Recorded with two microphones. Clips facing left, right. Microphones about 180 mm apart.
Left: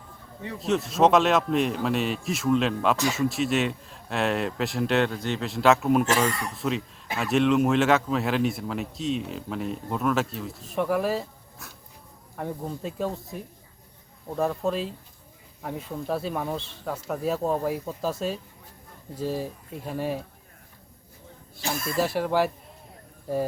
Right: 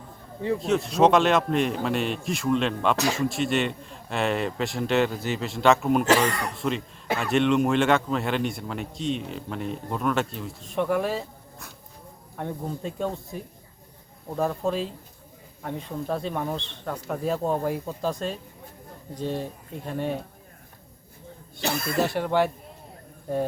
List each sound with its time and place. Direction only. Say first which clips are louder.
0.6 s a man's voice: even; centre (ahead or behind)
21.6 s speech: right 2 dB; 70° right (ahead or behind)
22.0 s a man's voice: even; centre (ahead or behind)